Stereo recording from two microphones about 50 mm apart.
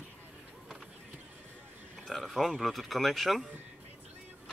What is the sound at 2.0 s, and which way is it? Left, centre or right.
Speech, centre.